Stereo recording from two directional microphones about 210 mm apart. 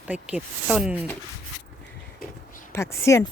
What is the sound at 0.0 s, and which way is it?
Speech, 5° right (ahead or behind).